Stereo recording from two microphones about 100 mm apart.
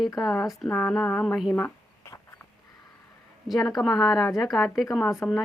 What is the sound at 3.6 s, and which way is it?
Speech, 40° left (ahead or behind).